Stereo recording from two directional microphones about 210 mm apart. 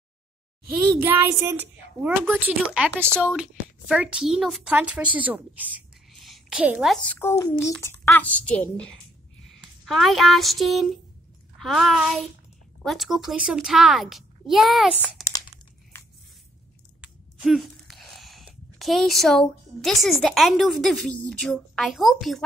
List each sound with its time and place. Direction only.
1.0 s child singing: 10° right (ahead or behind)
2.0 s a child's voice: 10° right (ahead or behind)
15.2 s crumpling: 20° left (ahead or behind)
15.9 s a sound: 10° left (ahead or behind)
17.0 s a sound: centre (ahead or behind)
21.3 s speech: 5° left (ahead or behind)